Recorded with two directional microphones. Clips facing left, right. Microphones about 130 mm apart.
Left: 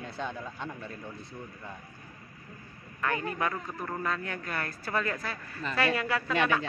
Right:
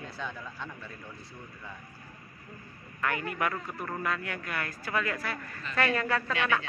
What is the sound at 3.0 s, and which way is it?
A man's voice, 25° left (ahead or behind).